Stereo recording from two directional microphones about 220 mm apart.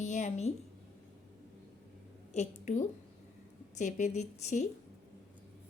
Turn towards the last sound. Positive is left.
turn(degrees=30)  # may be behind; listen again after turning